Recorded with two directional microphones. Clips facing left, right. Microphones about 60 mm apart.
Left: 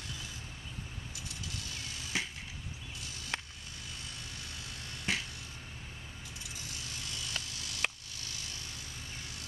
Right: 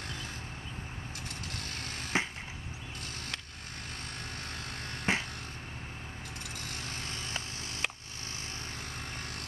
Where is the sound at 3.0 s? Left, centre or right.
Right.